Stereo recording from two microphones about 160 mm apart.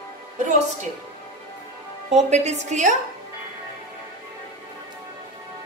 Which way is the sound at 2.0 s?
45° right (ahead or behind).